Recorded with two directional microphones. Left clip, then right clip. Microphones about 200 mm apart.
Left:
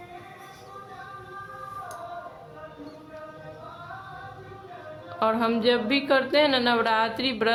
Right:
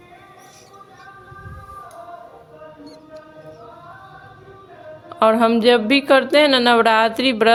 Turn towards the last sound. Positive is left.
turn(degrees=-40)  # may be behind; listen again after turning